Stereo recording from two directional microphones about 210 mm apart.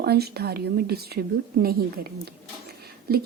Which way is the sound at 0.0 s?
50° right (ahead or behind).